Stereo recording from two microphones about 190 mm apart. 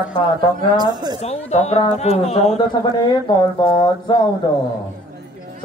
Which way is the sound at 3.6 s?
25° left (ahead or behind).